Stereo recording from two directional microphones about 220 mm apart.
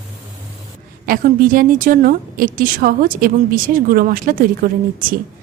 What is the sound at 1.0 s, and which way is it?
A woman's voice, 40° right (ahead or behind).